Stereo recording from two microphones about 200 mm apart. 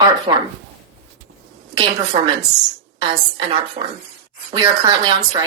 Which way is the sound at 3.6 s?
25° right (ahead or behind).